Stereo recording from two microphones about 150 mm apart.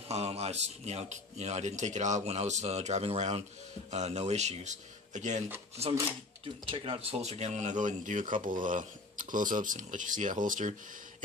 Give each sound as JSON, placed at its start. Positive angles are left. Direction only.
{"t": 0.1, "sound": "speech", "side_deg": -45}